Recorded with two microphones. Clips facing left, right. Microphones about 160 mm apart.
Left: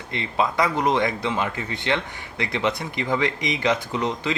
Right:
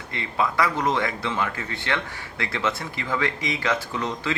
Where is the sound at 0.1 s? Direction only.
20° left (ahead or behind).